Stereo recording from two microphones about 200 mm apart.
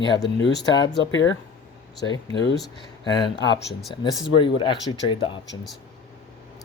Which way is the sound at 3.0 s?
20° left (ahead or behind).